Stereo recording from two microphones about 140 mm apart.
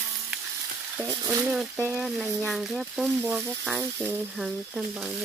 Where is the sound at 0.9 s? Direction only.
15° right (ahead or behind).